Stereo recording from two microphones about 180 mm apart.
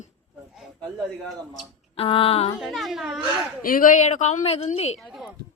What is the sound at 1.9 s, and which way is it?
Speech, 30° left (ahead or behind).